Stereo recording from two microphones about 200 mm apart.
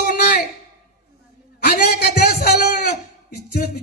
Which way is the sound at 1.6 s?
55° left (ahead or behind).